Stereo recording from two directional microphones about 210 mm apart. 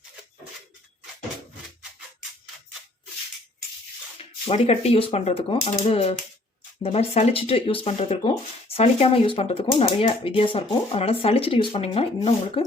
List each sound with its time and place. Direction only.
4.4 s speech: 30° left (ahead or behind)